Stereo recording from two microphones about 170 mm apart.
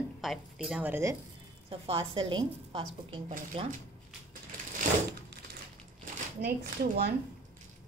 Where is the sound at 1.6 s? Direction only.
35° right (ahead or behind).